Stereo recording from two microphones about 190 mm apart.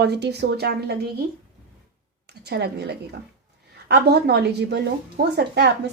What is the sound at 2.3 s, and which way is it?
A woman's voice, 60° right (ahead or behind).